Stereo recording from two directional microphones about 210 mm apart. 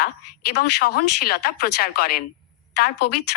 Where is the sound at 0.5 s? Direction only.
50° left (ahead or behind).